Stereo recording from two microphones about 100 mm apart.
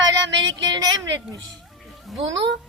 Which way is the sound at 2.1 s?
Centre (ahead or behind).